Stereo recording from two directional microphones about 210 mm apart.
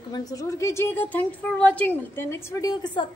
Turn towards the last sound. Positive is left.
turn(degrees=20)  # may be behind; listen again after turning